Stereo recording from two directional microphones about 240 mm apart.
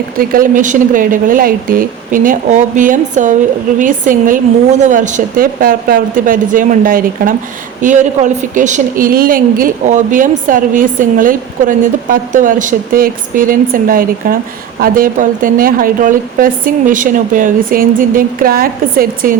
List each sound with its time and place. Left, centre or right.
0.2 s a woman's voice: right